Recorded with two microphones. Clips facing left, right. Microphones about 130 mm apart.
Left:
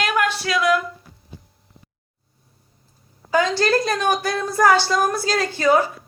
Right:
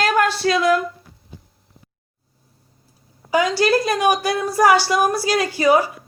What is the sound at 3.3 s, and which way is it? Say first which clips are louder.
A woman's voice: right 1 dB; 10° right (ahead or behind).